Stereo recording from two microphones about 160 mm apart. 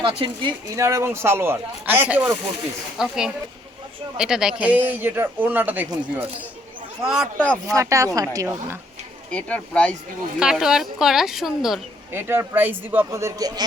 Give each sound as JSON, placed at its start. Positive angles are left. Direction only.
{"t": 0.0, "sound": "a woman's voice", "side_deg": -30}
{"t": 7.0, "sound": "a woman's voice", "side_deg": -5}
{"t": 7.3, "sound": "speech", "side_deg": 10}
{"t": 7.7, "sound": "speech", "side_deg": -20}
{"t": 9.3, "sound": "speech", "side_deg": 5}
{"t": 10.4, "sound": "a woman's voice", "side_deg": -5}
{"t": 12.1, "sound": "speech", "side_deg": -15}